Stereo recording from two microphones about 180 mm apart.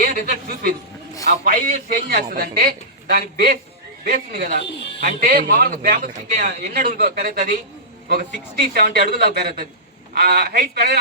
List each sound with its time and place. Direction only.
0.0 s a woman's voice: 45° right (ahead or behind)
4.6 s speech: 80° left
4.9 s a man's voice: 55° right (ahead or behind)